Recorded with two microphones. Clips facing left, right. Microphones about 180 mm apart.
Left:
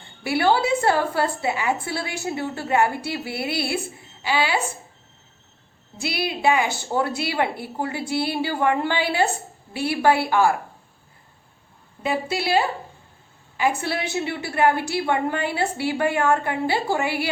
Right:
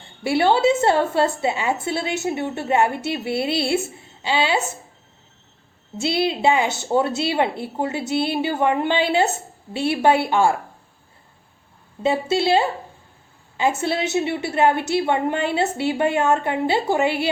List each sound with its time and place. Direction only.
0.2 s a woman's voice: 25° right (ahead or behind)
6.0 s a woman's voice: 25° right (ahead or behind)
12.0 s a woman's voice: 25° right (ahead or behind)